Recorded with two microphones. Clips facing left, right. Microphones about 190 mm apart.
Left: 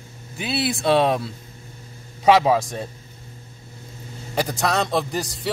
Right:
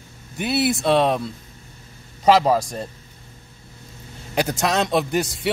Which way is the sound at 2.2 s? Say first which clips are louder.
Even; 5° left (ahead or behind).